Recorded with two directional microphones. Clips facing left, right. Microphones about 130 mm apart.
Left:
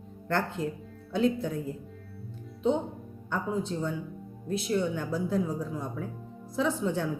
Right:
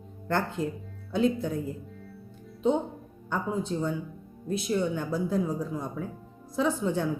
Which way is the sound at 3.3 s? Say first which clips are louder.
Right 1 dB; 15° right (ahead or behind).